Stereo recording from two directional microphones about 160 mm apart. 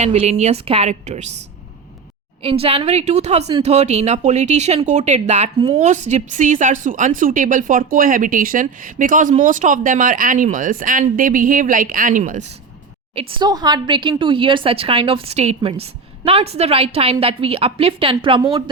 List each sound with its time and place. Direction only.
0.0 s speech: 45° right (ahead or behind)
2.4 s a woman's voice: 35° right (ahead or behind); by 12.5 s 50° right (ahead or behind)
13.1 s speech: 25° right (ahead or behind)